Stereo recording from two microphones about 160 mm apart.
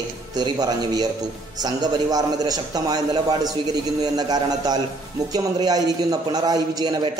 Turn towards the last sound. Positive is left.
turn(degrees=-25)  # may be behind; listen again after turning